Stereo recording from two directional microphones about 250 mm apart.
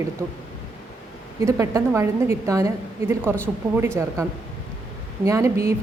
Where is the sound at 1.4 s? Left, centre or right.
Centre.